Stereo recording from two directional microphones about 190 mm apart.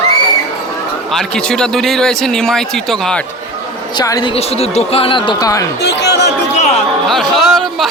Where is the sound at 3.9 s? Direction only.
20° left (ahead or behind).